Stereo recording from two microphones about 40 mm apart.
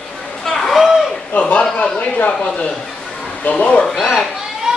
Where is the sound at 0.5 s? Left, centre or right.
Centre.